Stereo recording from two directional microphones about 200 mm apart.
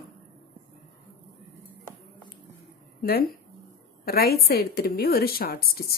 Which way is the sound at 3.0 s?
50° left (ahead or behind).